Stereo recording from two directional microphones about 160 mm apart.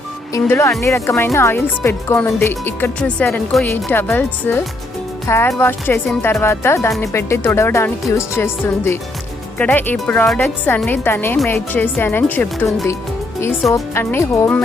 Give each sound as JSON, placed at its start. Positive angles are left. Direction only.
{"t": 0.3, "sound": "speech", "side_deg": 15}
{"t": 13.7, "sound": "speech", "side_deg": 15}